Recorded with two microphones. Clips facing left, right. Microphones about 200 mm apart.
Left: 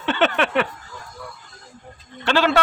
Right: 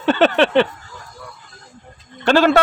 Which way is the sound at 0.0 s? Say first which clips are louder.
Right 6 dB; 40° right (ahead or behind).